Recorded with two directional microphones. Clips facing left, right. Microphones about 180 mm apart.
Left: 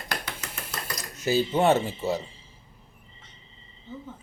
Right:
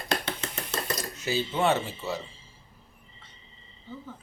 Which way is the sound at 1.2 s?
45° left (ahead or behind).